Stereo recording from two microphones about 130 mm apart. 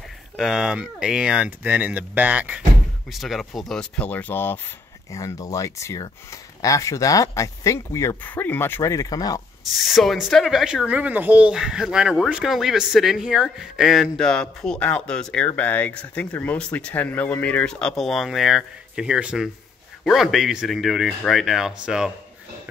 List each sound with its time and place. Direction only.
0.4 s speech: 5° right (ahead or behind)
3.1 s speech: centre (ahead or behind); by 9.4 s 30° left (ahead or behind)
9.8 s speech: centre (ahead or behind)